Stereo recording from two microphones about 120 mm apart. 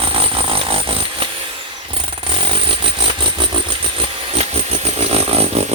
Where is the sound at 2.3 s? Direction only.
45° right (ahead or behind).